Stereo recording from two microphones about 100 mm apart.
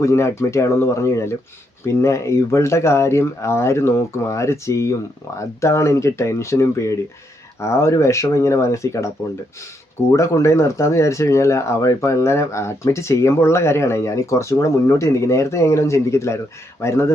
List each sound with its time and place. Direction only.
0.0 s speech: 30° left (ahead or behind)
10.1 s speech: 30° left (ahead or behind)